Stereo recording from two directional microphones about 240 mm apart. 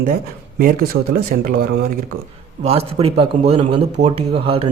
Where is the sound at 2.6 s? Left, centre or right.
Right.